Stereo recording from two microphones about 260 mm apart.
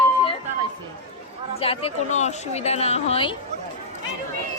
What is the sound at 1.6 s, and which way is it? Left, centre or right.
A woman's voice, left.